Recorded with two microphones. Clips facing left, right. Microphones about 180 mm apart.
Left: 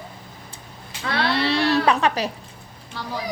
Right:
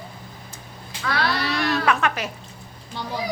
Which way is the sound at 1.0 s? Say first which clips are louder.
Left 2 dB; 25° left (ahead or behind).